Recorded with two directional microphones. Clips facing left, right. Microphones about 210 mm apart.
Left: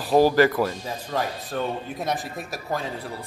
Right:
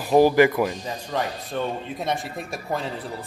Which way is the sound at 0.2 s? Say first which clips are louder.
Right 2 dB; 15° right (ahead or behind).